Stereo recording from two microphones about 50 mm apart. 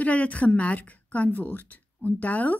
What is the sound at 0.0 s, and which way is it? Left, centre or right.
A woman's voice, left.